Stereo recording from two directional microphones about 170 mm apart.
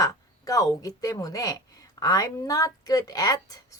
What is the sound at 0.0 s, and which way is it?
Speech, 20° left (ahead or behind).